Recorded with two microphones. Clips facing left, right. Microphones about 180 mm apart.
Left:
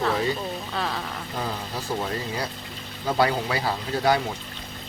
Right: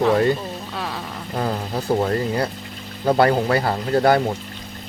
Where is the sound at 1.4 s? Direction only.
50° right (ahead or behind).